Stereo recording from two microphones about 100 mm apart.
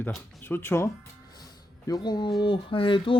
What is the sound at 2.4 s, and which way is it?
Speech, 60° left (ahead or behind).